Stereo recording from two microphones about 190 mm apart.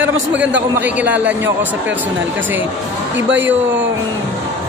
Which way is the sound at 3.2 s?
75° right (ahead or behind).